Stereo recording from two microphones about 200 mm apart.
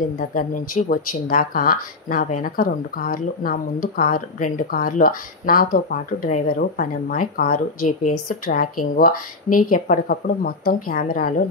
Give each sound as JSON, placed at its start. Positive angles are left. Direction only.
{"t": 0.2, "sound": "speech", "side_deg": 45}